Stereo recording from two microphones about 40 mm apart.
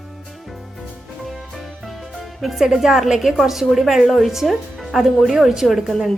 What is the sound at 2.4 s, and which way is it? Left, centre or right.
A woman's voice, centre.